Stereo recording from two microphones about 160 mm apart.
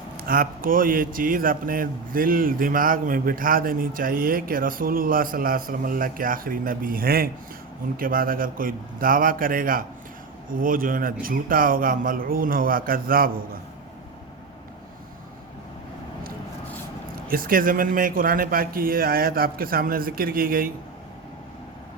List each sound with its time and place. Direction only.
0.2 s speech: 65° right (ahead or behind)
17.2 s speech: 65° right (ahead or behind)